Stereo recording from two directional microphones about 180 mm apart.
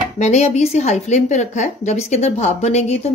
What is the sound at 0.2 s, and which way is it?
A woman's voice, 40° left (ahead or behind).